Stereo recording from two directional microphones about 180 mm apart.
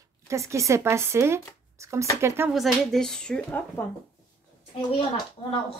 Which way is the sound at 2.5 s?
Centre (ahead or behind).